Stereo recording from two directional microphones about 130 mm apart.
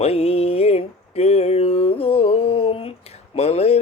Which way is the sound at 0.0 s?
55° left (ahead or behind).